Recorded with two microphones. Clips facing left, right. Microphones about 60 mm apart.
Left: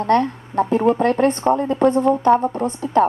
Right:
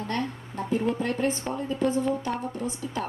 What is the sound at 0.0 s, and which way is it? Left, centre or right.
A woman's voice, left.